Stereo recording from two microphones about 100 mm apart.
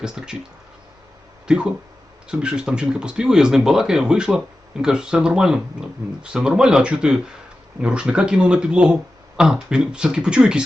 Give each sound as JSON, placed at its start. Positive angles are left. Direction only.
{"t": 1.5, "sound": "speech", "side_deg": -10}